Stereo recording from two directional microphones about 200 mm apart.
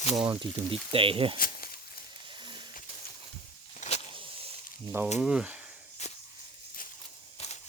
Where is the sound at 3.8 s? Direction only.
40° left (ahead or behind).